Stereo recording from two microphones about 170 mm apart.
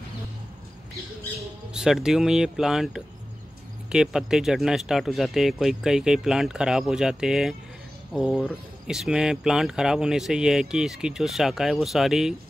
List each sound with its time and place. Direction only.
1.7 s speech: 5° right (ahead or behind)